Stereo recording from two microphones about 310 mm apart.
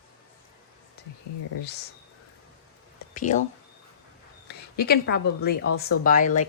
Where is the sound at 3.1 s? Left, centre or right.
Left.